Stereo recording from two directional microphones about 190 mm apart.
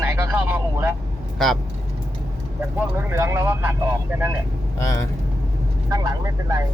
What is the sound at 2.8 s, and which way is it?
Speech, 10° right (ahead or behind).